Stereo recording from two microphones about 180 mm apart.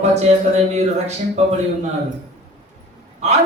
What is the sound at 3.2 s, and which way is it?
Speech, 40° right (ahead or behind).